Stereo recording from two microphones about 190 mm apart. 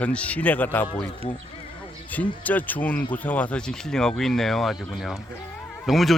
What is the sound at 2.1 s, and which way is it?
A man's voice, 10° left (ahead or behind).